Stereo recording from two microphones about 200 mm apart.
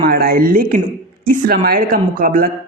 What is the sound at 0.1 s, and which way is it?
Speech, 50° right (ahead or behind).